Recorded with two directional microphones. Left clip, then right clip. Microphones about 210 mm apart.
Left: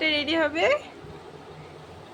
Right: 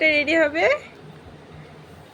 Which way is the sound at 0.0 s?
5° right (ahead or behind).